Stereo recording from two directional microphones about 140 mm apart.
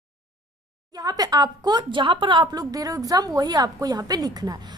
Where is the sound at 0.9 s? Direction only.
25° right (ahead or behind).